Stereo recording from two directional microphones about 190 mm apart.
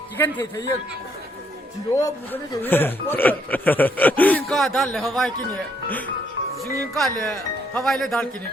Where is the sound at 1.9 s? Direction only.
15° left (ahead or behind).